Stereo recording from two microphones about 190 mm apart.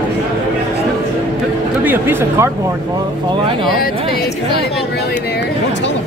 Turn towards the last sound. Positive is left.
turn(degrees=55)  # may be behind; listen again after turning